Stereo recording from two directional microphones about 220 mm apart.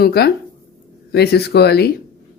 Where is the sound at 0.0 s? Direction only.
45° left (ahead or behind).